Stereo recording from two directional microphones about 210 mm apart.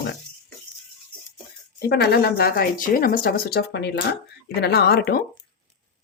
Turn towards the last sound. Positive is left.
turn(degrees=50)  # may be behind; listen again after turning